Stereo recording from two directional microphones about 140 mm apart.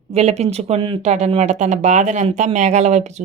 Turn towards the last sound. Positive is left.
turn(degrees=-55)  # may be behind; listen again after turning